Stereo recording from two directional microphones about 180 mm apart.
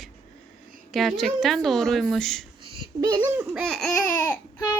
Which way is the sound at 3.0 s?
25° right (ahead or behind).